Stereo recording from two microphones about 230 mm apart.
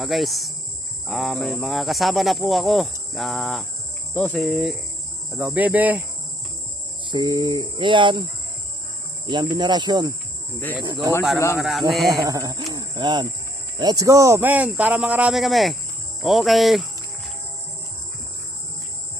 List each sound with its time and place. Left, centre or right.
0.0 s speech: centre
7.0 s cricket: centre
9.2 s cricket: centre
11.5 s speech: centre
12.1 s speech: centre
12.7 s cricket: centre
13.7 s speech: centre